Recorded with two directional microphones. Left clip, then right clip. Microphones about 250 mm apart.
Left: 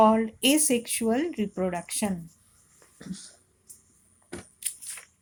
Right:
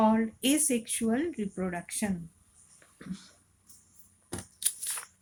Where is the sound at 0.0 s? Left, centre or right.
Left.